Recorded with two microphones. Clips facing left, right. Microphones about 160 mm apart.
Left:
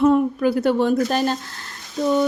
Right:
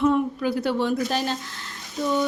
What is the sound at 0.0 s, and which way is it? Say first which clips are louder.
A woman's voice: left 5 dB; 45° left (ahead or behind).